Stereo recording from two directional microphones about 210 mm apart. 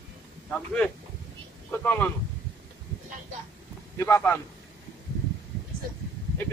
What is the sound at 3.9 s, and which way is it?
Speech, 15° left (ahead or behind).